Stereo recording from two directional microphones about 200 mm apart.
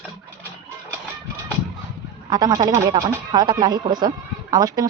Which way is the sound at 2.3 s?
20° right (ahead or behind).